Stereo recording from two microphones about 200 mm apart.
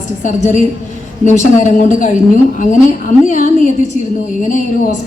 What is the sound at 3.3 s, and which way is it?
A man's voice, 35° left (ahead or behind).